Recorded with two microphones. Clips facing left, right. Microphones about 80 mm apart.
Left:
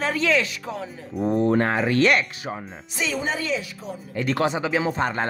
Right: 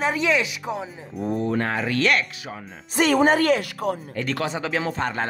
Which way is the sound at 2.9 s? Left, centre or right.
Right.